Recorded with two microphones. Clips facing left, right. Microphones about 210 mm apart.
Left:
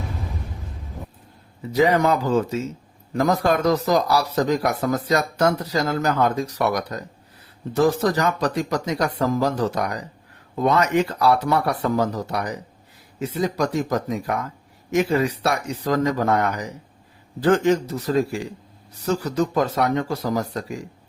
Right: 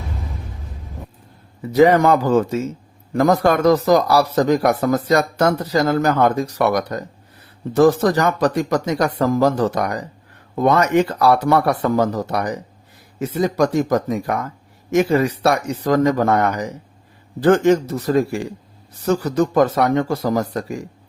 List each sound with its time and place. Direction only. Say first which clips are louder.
1.7 s speech: right 5 dB; 50° right (ahead or behind)